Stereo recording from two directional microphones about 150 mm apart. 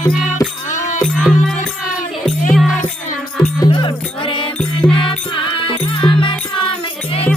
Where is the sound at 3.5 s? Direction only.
30° left (ahead or behind).